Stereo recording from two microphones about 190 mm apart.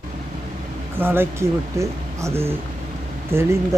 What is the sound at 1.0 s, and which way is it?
Speech, 10° right (ahead or behind).